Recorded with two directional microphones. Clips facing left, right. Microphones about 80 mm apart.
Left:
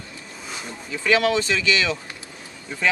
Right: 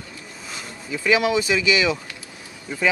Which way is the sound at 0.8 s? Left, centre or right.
Centre.